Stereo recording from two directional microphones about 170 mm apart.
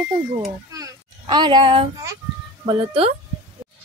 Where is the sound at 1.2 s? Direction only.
25° right (ahead or behind).